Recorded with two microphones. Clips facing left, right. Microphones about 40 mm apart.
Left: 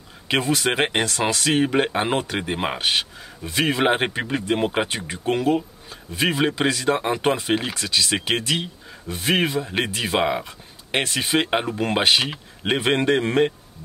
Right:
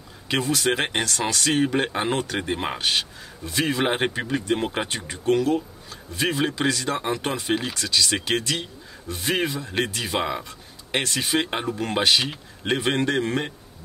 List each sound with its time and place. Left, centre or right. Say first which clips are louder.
0.6 s speech: left 2 dB; centre
9.7 s speech: left 2 dB; centre